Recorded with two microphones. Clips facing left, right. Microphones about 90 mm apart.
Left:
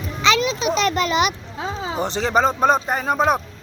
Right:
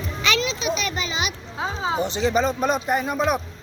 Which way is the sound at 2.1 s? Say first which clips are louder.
Left 6 dB; 45° left (ahead or behind).